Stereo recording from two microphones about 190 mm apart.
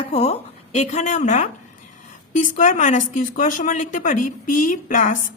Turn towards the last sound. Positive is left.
turn(degrees=45)  # may be behind; listen again after turning